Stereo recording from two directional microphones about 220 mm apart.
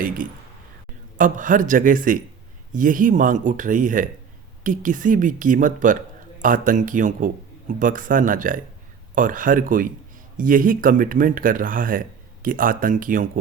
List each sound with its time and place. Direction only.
1.2 s speech: 35° right (ahead or behind)